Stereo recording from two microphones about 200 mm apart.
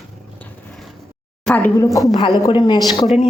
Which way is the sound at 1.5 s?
10° left (ahead or behind).